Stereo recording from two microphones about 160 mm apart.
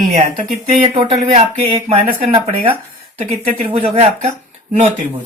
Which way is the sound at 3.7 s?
40° right (ahead or behind).